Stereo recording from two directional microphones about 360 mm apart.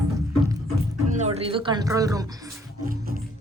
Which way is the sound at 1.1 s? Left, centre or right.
Centre.